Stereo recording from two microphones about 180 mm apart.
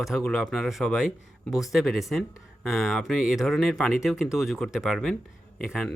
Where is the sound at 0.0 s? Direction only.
Centre (ahead or behind).